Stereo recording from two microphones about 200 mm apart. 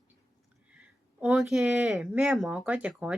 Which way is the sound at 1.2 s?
5° right (ahead or behind).